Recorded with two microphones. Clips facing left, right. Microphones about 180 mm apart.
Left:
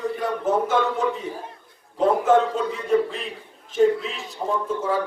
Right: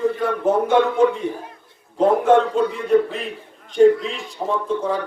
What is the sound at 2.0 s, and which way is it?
A man's voice, centre (ahead or behind).